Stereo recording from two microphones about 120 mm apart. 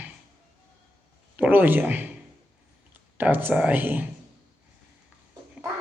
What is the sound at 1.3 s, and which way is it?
Speech, 15° right (ahead or behind).